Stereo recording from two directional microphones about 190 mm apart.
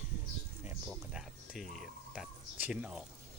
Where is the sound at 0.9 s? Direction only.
Centre (ahead or behind).